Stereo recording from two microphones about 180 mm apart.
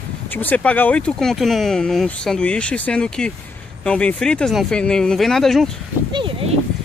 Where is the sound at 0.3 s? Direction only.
10° left (ahead or behind).